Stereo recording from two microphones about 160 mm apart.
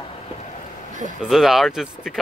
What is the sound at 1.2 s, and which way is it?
Speech, 5° right (ahead or behind).